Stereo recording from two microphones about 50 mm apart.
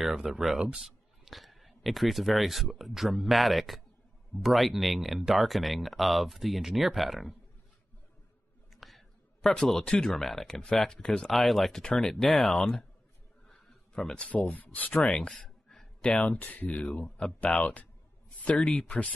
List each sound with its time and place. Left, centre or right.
0.0 s speech: centre
8.7 s a sound: centre
9.6 s speech: centre
9.8 s speech: centre
10.1 s speech: centre
13.5 s a sound: centre
14.1 s speech: left
15.1 s a sound: centre
16.0 s speech: centre
16.3 s speech: left
17.5 s speech: centre
18.4 s speech: left